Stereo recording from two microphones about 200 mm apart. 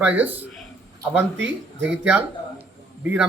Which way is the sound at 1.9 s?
5° right (ahead or behind).